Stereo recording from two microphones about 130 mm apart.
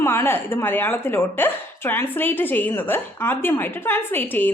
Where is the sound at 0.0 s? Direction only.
20° left (ahead or behind).